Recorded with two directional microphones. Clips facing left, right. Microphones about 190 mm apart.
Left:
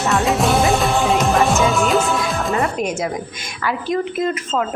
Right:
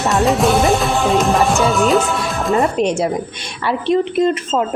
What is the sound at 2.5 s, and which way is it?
A woman's voice, 30° right (ahead or behind).